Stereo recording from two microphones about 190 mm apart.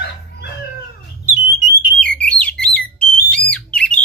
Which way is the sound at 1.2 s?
15° right (ahead or behind).